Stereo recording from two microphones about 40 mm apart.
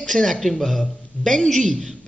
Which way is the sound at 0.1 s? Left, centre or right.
Centre.